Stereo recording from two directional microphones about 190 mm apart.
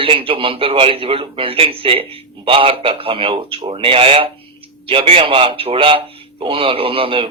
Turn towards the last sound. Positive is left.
turn(degrees=-30)  # may be behind; listen again after turning